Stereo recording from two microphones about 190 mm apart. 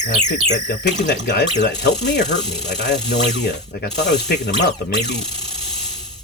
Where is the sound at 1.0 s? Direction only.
60° left (ahead or behind).